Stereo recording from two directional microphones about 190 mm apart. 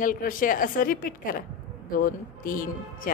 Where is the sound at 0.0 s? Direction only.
45° left (ahead or behind).